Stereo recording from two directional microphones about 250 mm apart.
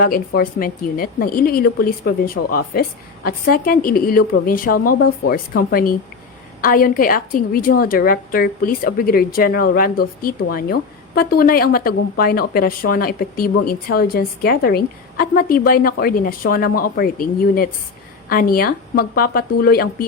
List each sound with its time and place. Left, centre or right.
0.0 s a woman's voice: left